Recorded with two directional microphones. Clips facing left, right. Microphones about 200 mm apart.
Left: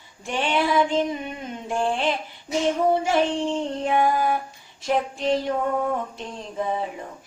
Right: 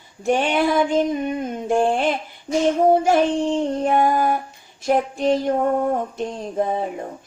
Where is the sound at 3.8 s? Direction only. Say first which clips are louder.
Right 1 dB; 45° right (ahead or behind).